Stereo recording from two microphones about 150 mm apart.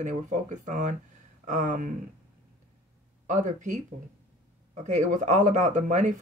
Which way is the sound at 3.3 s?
55° right (ahead or behind).